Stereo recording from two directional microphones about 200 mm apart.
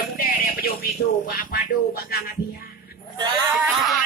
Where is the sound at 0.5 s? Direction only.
45° left (ahead or behind).